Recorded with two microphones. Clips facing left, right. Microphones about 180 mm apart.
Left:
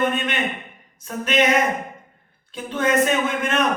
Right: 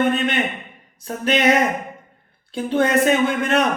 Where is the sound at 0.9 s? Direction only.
35° right (ahead or behind).